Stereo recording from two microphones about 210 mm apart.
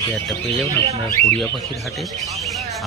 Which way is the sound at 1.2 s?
30° right (ahead or behind).